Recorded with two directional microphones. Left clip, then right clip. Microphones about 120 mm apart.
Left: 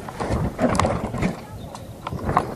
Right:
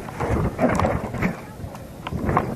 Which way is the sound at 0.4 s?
25° right (ahead or behind).